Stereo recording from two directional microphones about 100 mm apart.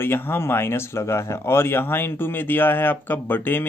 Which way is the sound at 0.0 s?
20° left (ahead or behind).